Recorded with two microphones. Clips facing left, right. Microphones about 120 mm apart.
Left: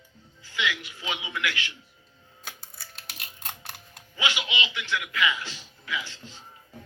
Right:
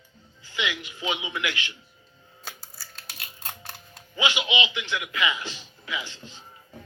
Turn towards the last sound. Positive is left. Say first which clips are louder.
# even
turn(degrees=-15)  # may be behind; listen again after turning